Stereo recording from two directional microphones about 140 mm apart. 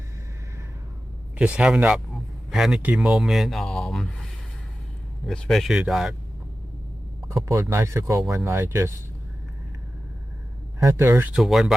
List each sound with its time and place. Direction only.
1.4 s speech: 5° right (ahead or behind)
7.3 s speech: 20° right (ahead or behind)
10.8 s speech: 20° right (ahead or behind)
11.3 s speech: centre (ahead or behind)